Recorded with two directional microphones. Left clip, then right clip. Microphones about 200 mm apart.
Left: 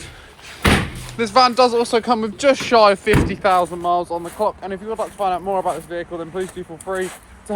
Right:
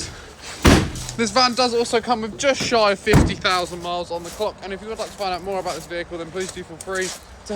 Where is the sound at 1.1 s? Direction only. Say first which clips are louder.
Left 4 dB; 5° right (ahead or behind).